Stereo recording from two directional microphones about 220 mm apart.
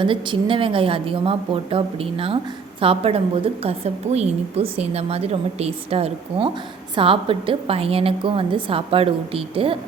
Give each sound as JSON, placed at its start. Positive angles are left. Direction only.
{"t": 0.0, "sound": "a woman's voice", "side_deg": -25}